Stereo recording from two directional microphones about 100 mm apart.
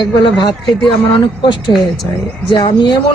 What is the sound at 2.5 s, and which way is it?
Speech, 50° left (ahead or behind).